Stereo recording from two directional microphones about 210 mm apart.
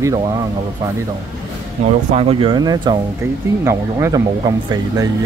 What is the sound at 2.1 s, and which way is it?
Speech, 30° right (ahead or behind).